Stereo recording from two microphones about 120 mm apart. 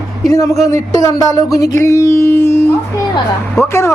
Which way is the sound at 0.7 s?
25° left (ahead or behind).